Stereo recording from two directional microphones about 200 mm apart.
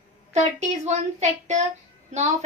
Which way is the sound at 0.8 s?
35° right (ahead or behind).